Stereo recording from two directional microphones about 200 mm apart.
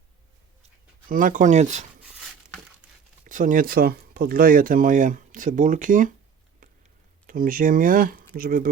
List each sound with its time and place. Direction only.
1.0 s speech: 40° right (ahead or behind)
2.8 s crumpling: 5° right (ahead or behind)
3.2 s speech: 40° right (ahead or behind)
7.3 s speech: 45° right (ahead or behind)